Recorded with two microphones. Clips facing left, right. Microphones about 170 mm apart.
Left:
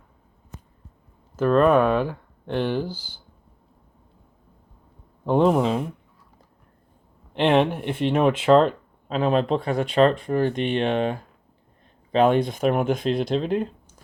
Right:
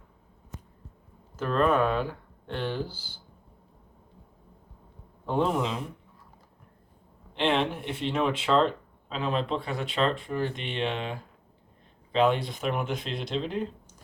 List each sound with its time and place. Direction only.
1.4 s speech: 55° left (ahead or behind)
5.2 s a man's voice: 70° left (ahead or behind)
7.3 s speech: 55° left (ahead or behind)